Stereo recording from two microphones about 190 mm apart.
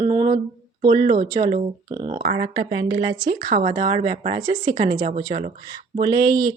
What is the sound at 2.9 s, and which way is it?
Speech, 25° right (ahead or behind).